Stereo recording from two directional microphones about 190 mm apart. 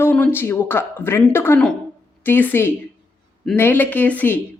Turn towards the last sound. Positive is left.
turn(degrees=10)  # may be behind; listen again after turning